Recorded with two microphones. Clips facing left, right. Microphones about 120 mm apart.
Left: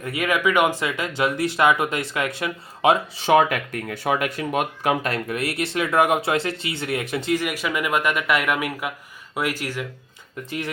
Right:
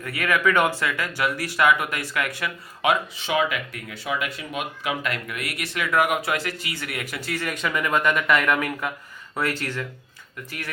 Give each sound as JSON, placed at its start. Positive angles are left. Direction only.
{"t": 0.0, "sound": "speech", "side_deg": 20}
{"t": 3.3, "sound": "speech", "side_deg": 50}
{"t": 5.0, "sound": "speech", "side_deg": 35}